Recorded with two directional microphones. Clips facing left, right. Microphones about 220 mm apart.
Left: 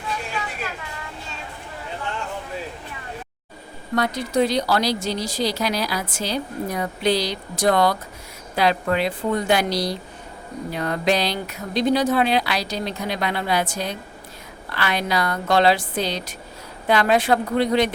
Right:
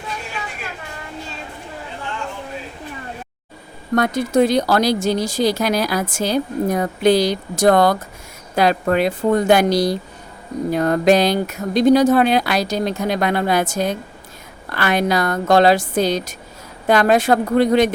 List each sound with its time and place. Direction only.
3.9 s speech: 50° right (ahead or behind)